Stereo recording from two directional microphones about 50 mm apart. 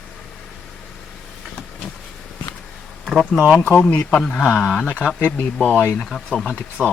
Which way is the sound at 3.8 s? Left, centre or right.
Left.